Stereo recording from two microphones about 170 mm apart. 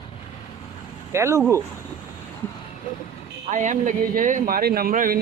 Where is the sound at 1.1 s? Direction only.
15° right (ahead or behind).